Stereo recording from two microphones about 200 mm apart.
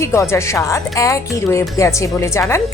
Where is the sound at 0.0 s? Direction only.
15° left (ahead or behind).